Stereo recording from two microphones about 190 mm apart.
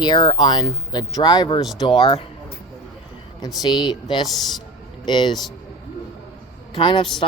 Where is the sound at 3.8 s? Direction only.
25° left (ahead or behind).